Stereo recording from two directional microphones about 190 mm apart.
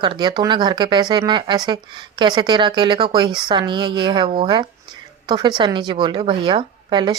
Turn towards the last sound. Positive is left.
turn(degrees=-25)  # may be behind; listen again after turning